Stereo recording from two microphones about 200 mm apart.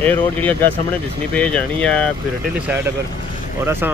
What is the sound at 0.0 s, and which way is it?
Speech, 10° left (ahead or behind).